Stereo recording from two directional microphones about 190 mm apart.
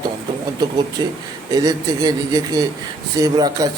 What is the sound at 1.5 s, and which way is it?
A man's voice, 20° right (ahead or behind).